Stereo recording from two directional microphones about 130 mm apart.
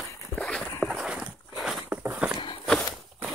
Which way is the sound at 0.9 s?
5° right (ahead or behind).